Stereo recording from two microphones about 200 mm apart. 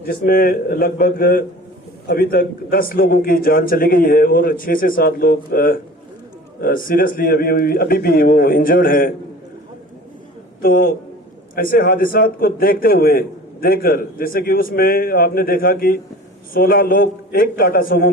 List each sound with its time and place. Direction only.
0.0 s a man's voice: 45° left (ahead or behind)
10.6 s a man's voice: 45° left (ahead or behind)